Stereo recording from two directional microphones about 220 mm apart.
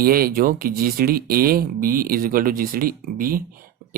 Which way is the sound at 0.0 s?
40° right (ahead or behind).